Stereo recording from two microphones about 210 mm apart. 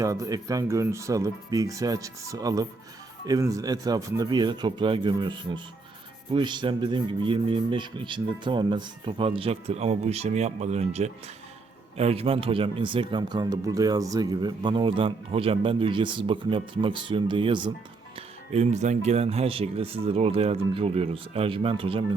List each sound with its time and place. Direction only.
0.0 s speech: 15° right (ahead or behind)